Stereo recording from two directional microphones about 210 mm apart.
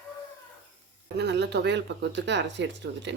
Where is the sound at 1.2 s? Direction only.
55° right (ahead or behind).